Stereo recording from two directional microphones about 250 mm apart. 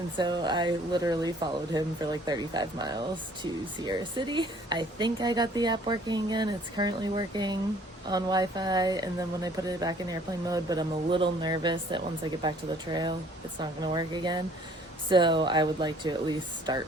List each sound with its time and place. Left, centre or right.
0.2 s speech: centre